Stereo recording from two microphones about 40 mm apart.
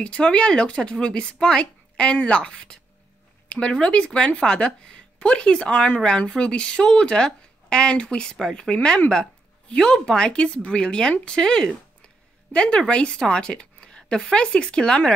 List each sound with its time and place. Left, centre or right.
0.0 s speech: left